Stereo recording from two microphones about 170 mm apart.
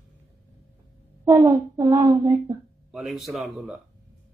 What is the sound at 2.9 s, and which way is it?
Speech, centre (ahead or behind).